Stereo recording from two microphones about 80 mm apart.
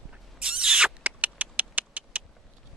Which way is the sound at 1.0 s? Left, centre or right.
Centre.